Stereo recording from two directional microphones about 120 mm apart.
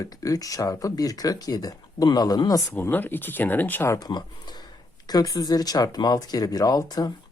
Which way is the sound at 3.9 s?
35° left (ahead or behind).